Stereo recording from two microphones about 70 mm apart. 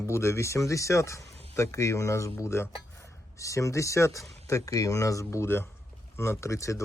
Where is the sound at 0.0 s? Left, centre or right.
Left.